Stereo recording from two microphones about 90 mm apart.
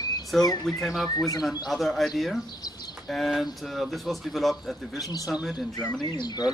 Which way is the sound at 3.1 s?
Centre (ahead or behind).